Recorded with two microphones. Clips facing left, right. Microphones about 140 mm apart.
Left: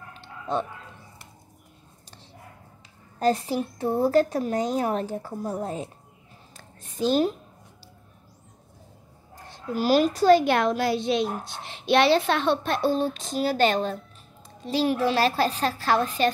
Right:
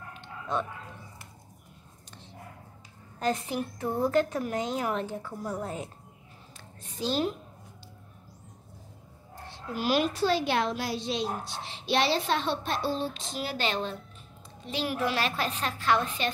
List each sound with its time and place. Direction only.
0.2 s a sound: 30° left (ahead or behind)
3.2 s a woman's voice: 35° left (ahead or behind)
5.4 s a woman's voice: 25° left (ahead or behind)
6.5 s a sound: 50° left (ahead or behind)
9.3 s a child's voice: 40° left (ahead or behind)
14.7 s a woman's voice: 35° left (ahead or behind)